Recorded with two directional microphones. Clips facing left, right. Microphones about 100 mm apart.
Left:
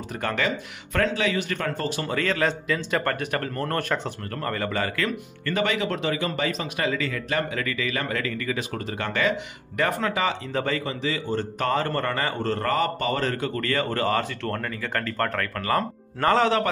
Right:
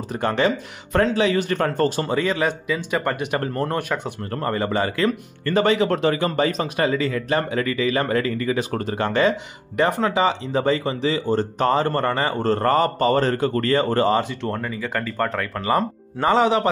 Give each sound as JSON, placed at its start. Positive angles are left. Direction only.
{"t": 0.1, "sound": "speech", "side_deg": -30}
{"t": 2.0, "sound": "speech", "side_deg": -15}
{"t": 4.2, "sound": "speech", "side_deg": -25}
{"t": 14.6, "sound": "speech", "side_deg": -10}